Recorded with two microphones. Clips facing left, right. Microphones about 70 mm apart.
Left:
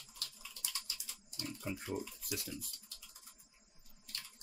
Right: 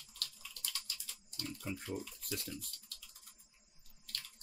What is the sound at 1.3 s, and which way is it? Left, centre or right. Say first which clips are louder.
Speech: left 1 dB; centre.